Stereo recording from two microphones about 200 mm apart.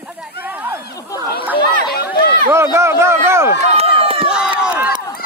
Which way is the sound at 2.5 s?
15° right (ahead or behind).